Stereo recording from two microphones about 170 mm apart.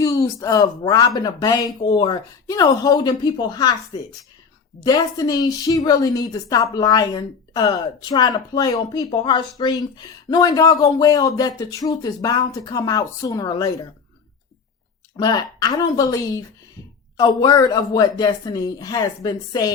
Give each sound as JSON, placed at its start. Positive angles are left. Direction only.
{"t": 0.0, "sound": "a woman's voice", "side_deg": 20}
{"t": 4.8, "sound": "a woman's voice", "side_deg": 20}
{"t": 15.1, "sound": "a woman's voice", "side_deg": 25}